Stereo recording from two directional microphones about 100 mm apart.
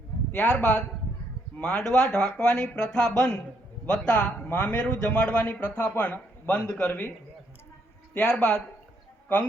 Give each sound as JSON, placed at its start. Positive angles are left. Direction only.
{"t": 0.3, "sound": "speech", "side_deg": 15}
{"t": 8.1, "sound": "speech", "side_deg": 10}